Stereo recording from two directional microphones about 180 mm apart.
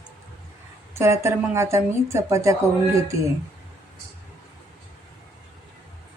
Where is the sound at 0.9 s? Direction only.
15° right (ahead or behind).